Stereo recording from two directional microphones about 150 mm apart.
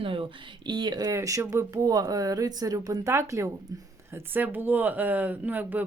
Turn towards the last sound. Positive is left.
turn(degrees=-10)  # may be behind; listen again after turning